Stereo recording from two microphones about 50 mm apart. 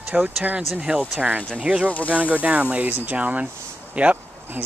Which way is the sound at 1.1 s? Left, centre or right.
Right.